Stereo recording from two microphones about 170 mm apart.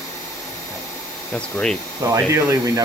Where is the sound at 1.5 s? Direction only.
5° left (ahead or behind).